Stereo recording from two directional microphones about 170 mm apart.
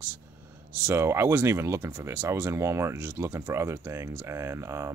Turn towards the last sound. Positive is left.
turn(degrees=-15)  # may be behind; listen again after turning